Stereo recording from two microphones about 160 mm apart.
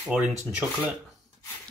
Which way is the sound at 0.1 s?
5° right (ahead or behind).